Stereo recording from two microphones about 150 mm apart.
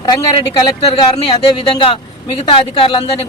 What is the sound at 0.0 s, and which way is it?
Speech, 30° left (ahead or behind).